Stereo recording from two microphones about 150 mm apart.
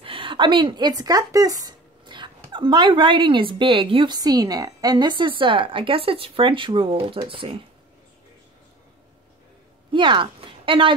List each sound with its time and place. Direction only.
0.0 s speech: 35° right (ahead or behind)
9.8 s speech: 30° right (ahead or behind)